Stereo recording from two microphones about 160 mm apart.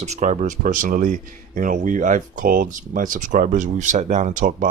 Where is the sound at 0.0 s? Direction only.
45° right (ahead or behind).